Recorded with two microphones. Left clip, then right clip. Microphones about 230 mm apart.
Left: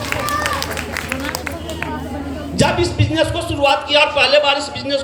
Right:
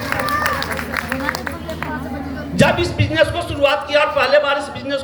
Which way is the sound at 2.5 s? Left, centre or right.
Right.